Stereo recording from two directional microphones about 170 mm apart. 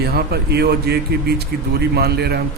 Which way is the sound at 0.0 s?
70° right (ahead or behind).